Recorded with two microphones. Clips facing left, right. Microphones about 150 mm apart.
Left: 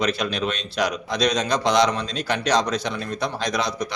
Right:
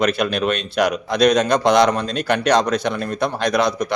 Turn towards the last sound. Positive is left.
turn(degrees=-55)  # may be behind; listen again after turning